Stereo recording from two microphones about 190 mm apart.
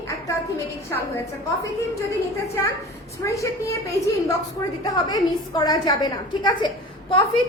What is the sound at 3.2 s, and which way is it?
Speech, 15° left (ahead or behind).